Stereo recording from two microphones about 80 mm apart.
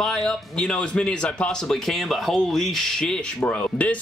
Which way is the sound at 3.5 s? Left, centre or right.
Centre.